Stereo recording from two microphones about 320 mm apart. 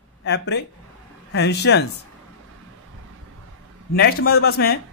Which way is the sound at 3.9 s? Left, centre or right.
Left.